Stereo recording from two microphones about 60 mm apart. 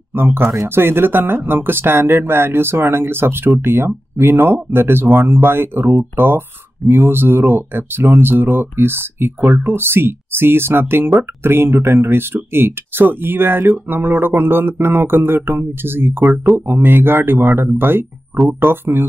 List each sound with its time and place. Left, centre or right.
0.1 s speech: right